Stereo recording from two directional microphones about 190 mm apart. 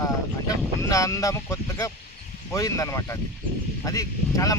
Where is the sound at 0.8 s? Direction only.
15° left (ahead or behind).